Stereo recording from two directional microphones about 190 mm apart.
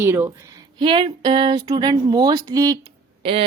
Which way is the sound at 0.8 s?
25° right (ahead or behind).